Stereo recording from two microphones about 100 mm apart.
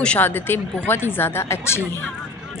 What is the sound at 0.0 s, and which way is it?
Speech, 15° left (ahead or behind).